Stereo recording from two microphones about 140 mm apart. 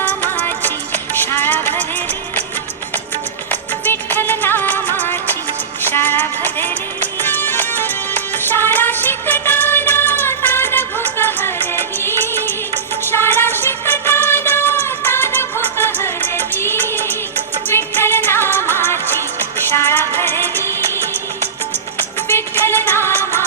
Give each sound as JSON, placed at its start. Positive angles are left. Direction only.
{"t": 0.0, "sound": "music", "side_deg": 10}
{"t": 3.5, "sound": "music", "side_deg": 15}
{"t": 22.3, "sound": "music", "side_deg": 15}